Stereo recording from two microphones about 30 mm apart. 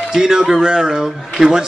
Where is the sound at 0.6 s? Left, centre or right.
Right.